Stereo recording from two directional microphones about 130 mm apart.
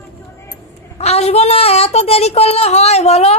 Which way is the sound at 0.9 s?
55° left (ahead or behind).